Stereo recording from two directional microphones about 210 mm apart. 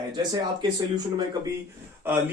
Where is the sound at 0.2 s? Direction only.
20° right (ahead or behind).